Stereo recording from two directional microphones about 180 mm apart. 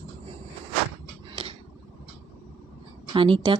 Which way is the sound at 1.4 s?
30° right (ahead or behind).